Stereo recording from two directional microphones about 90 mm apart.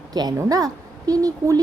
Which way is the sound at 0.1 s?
50° right (ahead or behind).